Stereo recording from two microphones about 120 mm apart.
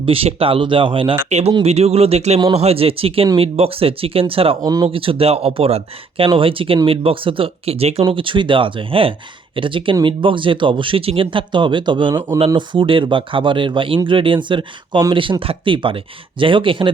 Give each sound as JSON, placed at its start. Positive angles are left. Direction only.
{"t": 0.0, "sound": "speech", "side_deg": -50}
{"t": 1.3, "sound": "speech", "side_deg": -65}
{"t": 4.6, "sound": "speech", "side_deg": -30}
{"t": 4.9, "sound": "speech", "side_deg": -50}
{"t": 8.0, "sound": "speech", "side_deg": -45}